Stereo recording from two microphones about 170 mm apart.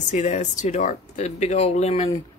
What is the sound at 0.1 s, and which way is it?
Speech, 45° left (ahead or behind).